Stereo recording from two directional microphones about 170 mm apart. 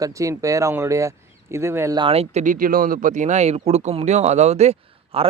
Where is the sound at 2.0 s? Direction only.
35° right (ahead or behind).